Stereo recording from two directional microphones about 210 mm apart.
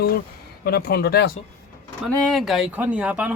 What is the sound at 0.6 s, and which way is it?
Speech, 45° left (ahead or behind).